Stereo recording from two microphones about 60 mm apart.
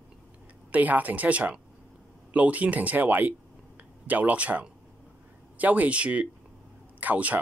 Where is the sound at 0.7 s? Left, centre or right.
Right.